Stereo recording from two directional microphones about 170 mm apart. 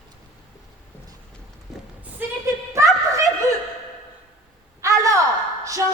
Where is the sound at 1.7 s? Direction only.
5° right (ahead or behind).